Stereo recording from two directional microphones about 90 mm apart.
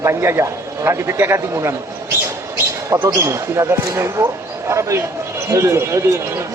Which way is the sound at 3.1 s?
35° right (ahead or behind).